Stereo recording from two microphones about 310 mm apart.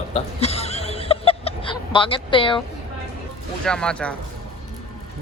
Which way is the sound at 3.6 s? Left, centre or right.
Centre.